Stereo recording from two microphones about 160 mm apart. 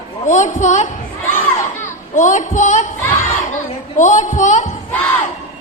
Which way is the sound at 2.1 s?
50° left (ahead or behind).